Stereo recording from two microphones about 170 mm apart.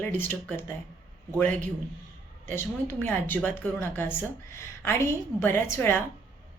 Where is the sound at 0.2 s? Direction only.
10° left (ahead or behind).